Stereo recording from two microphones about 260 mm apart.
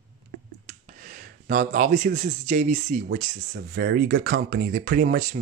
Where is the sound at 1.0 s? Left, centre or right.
Right.